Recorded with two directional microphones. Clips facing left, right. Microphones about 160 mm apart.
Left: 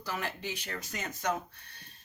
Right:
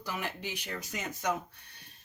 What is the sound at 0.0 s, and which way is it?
Speech, 15° right (ahead or behind).